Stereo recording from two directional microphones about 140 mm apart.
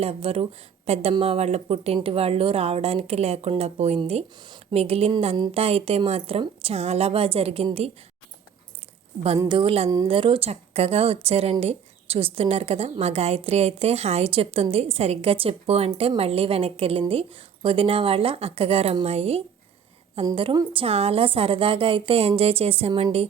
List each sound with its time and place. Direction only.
0.0 s a woman's voice: 45° right (ahead or behind)
9.5 s a woman's voice: 40° right (ahead or behind)
20.3 s a woman's voice: 35° right (ahead or behind)